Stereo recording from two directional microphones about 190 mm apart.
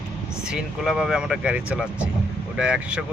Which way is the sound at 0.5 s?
Centre (ahead or behind).